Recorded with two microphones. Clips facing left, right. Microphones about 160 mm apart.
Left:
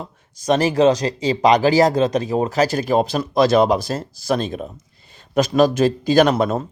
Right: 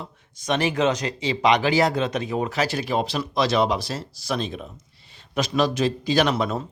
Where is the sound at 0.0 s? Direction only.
40° left (ahead or behind).